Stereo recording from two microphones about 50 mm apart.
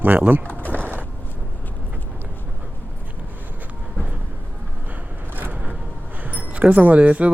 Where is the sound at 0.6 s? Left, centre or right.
Left.